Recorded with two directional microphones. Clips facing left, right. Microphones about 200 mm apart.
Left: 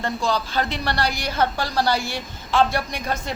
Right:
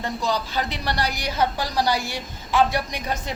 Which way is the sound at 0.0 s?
15° right (ahead or behind).